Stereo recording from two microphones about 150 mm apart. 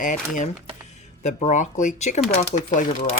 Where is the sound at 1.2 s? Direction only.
50° left (ahead or behind).